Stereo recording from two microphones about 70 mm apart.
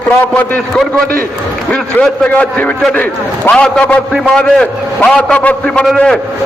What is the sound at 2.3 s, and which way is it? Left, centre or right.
A man's voice, left.